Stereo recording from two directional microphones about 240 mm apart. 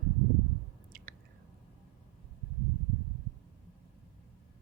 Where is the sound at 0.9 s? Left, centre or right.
Right.